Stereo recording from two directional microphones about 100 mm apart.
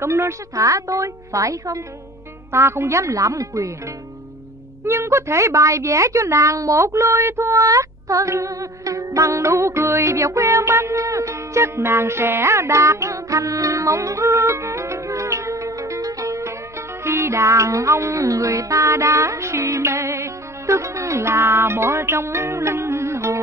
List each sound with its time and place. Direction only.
0.0 s a woman's voice: 25° right (ahead or behind)
4.8 s speech: 30° right (ahead or behind)
17.0 s music: 25° right (ahead or behind)